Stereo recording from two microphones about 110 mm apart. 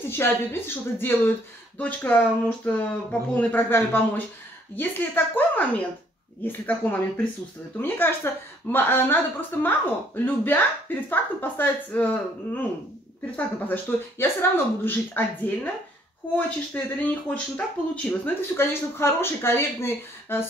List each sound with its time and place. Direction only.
0.0 s a woman's voice: 20° left (ahead or behind)